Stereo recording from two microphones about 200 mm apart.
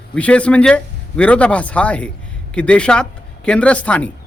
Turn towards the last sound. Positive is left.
turn(degrees=5)  # may be behind; listen again after turning